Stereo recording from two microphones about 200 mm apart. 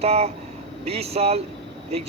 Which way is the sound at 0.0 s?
30° right (ahead or behind).